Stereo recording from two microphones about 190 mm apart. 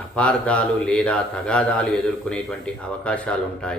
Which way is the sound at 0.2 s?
5° left (ahead or behind).